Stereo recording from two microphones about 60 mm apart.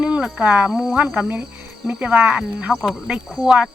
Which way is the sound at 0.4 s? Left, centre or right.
Right.